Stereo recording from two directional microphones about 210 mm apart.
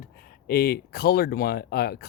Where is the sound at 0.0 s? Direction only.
45° left (ahead or behind).